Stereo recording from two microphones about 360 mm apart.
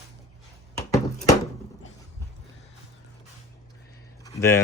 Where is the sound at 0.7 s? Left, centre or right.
Centre.